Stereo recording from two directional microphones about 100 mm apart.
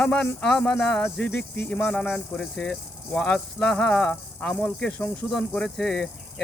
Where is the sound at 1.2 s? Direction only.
20° left (ahead or behind).